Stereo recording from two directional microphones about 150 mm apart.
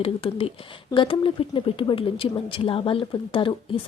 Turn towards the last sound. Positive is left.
turn(degrees=35)  # may be behind; listen again after turning